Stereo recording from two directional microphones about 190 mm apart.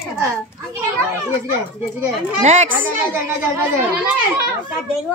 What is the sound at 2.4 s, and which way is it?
Speech, 35° right (ahead or behind).